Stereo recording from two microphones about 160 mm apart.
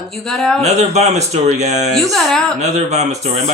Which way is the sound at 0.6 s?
45° right (ahead or behind).